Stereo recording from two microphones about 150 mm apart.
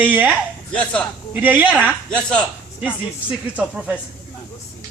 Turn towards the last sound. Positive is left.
turn(degrees=-5)  # may be behind; listen again after turning